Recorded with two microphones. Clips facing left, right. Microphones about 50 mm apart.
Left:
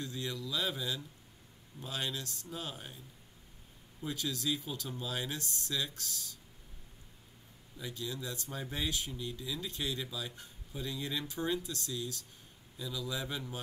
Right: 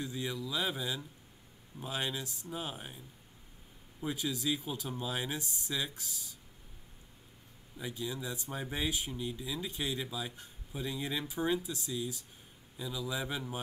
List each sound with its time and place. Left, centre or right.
0.0 s speech: centre
4.0 s speech: centre
7.7 s speech: centre